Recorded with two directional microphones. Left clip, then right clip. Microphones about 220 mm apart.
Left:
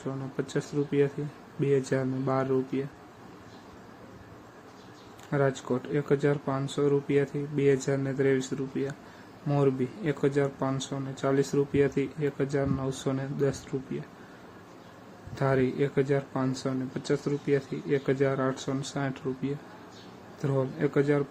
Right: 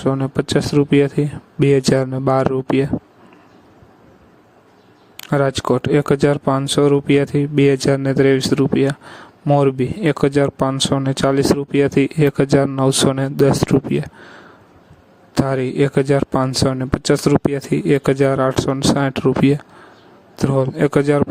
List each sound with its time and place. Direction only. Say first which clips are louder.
0.0 s speech: right 15 dB; 45° right (ahead or behind)
5.1 s speech: right 10 dB; 45° right (ahead or behind)
15.4 s speech: right 7 dB; 50° right (ahead or behind)